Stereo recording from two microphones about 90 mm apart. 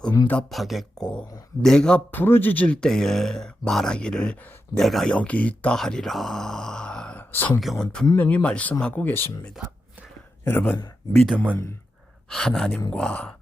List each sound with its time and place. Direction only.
0.5 s speech: centre (ahead or behind)
2.0 s a man's voice: 20° left (ahead or behind)
2.8 s speech: 5° left (ahead or behind)
5.1 s speech: 15° left (ahead or behind)
5.7 s speech: 5° left (ahead or behind)
7.2 s a sound: 20° left (ahead or behind)
7.6 s speech: 5° left (ahead or behind)
8.1 s a man's voice: 20° left (ahead or behind)
10.4 s a man's voice: 20° left (ahead or behind)
11.1 s speech: 5° left (ahead or behind)